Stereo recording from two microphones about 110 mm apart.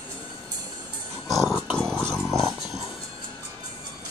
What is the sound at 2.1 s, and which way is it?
Music, centre (ahead or behind).